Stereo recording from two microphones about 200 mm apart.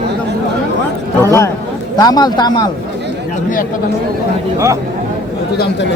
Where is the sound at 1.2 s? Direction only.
15° left (ahead or behind).